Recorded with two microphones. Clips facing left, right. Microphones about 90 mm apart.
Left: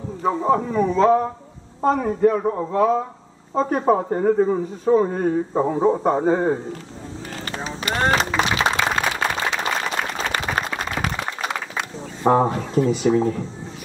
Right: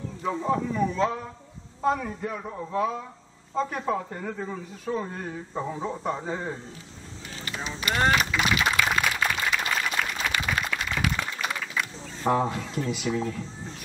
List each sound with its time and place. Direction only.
0.2 s a man's voice: 45° left (ahead or behind)
7.4 s a sound: 40° left (ahead or behind)
9.5 s applause: 30° left (ahead or behind)
12.3 s speech: 40° left (ahead or behind)